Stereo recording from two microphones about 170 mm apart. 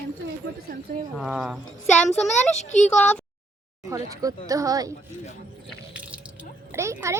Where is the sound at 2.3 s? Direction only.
45° left (ahead or behind).